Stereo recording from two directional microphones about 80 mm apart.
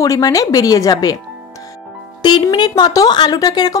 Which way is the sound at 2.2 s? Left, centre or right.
Left.